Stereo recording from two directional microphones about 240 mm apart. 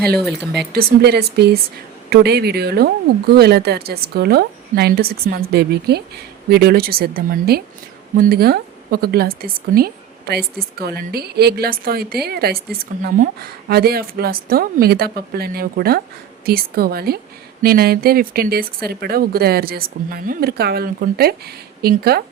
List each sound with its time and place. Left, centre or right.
0.2 s speech: centre
0.7 s a woman's voice: right